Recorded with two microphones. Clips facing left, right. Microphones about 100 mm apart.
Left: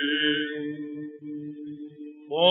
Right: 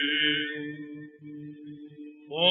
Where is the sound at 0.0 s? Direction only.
35° left (ahead or behind).